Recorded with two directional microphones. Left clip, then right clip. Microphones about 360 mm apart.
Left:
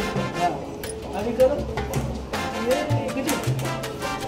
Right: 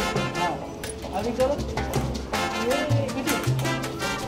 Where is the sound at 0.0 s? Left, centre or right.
Centre.